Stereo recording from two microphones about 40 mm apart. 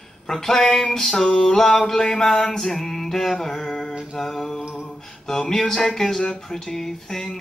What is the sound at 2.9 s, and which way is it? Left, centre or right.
Music, centre.